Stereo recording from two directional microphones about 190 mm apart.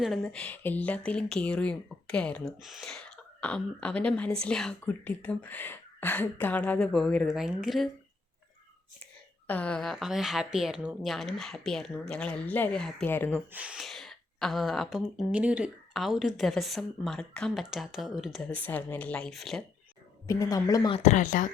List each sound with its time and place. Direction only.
0.0 s speech: centre (ahead or behind)
9.5 s speech: 5° left (ahead or behind)
13.5 s speech: 5° right (ahead or behind)
20.2 s speech: 20° left (ahead or behind)
20.9 s speech: 35° left (ahead or behind)